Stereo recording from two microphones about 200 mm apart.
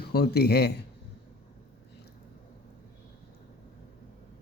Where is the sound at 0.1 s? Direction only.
50° left (ahead or behind).